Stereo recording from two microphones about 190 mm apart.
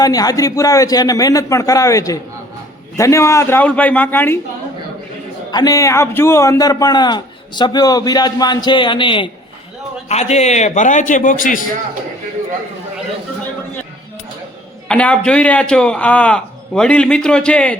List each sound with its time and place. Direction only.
0.0 s a man's voice: 20° left (ahead or behind)
5.5 s a man's voice: 20° left (ahead or behind); by 11.6 s 45° left (ahead or behind)
14.8 s a man's voice: 5° left (ahead or behind)